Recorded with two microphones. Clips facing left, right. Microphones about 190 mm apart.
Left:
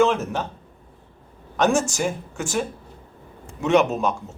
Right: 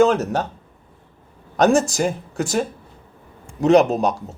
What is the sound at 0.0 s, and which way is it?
Speech, 40° right (ahead or behind).